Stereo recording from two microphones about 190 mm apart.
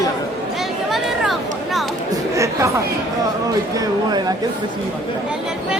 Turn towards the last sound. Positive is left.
turn(degrees=-20)  # may be behind; listen again after turning